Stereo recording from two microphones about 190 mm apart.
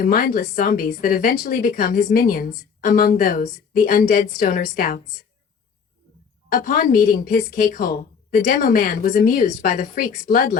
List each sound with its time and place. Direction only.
0.0 s a woman's voice: 45° left (ahead or behind)
6.5 s a woman's voice: 45° left (ahead or behind)